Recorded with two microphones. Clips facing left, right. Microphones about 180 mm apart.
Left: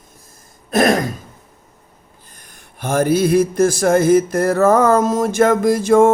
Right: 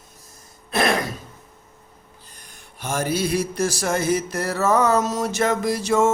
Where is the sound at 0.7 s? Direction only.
45° left (ahead or behind).